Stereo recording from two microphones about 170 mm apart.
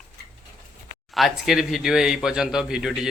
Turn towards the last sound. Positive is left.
turn(degrees=-5)  # may be behind; listen again after turning